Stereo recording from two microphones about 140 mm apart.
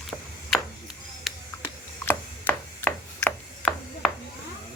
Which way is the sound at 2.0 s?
10° left (ahead or behind).